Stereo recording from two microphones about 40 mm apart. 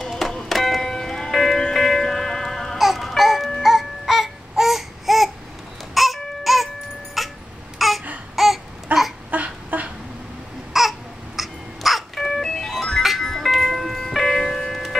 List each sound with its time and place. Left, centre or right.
0.0 s music: centre
0.5 s a sound: centre
1.6 s music: centre
3.2 s music: centre
3.6 s baby cry: centre
7.2 s a sound: centre
8.9 s a sound: right
10.7 s babbling: centre
12.2 s ice cream truck: centre
13.2 s music: centre
13.5 s music: centre